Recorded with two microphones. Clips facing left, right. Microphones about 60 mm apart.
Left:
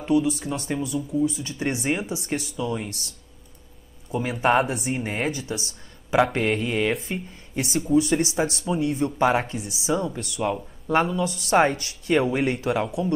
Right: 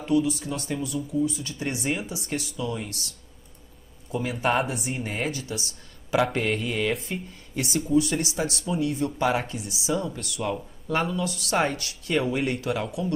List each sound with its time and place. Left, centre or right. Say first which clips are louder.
0.3 s speech: left 2 dB; left
4.3 s speech: left 4 dB; left